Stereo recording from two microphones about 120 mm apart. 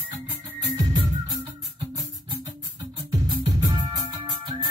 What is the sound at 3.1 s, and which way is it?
Music, 35° right (ahead or behind).